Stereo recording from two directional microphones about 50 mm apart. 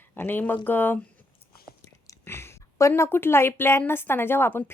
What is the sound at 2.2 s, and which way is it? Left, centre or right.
A woman's voice, left.